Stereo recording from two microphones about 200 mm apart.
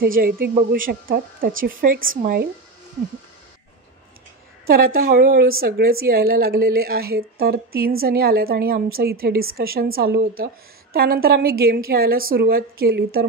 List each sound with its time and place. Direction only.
0.0 s a woman's voice: 45° right (ahead or behind)
4.6 s a woman's voice: 45° right (ahead or behind)